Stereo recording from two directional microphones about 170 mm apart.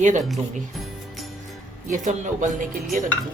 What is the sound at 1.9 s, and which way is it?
A woman's voice, 45° right (ahead or behind).